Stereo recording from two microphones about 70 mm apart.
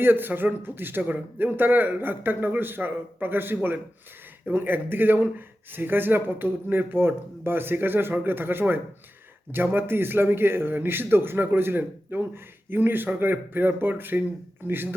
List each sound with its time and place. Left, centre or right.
0.0 s a man's voice: right